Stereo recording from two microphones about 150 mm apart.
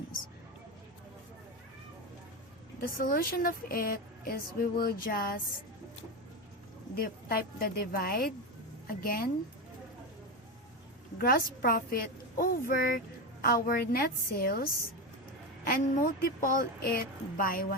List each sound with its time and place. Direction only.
2.8 s a woman's voice: 75° left (ahead or behind)
6.9 s a woman's voice: 80° left
11.2 s a woman's voice: 85° left